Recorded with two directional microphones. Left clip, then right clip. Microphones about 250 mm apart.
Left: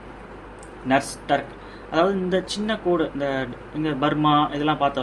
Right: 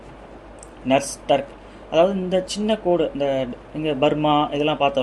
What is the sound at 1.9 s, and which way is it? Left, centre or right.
Speech, right.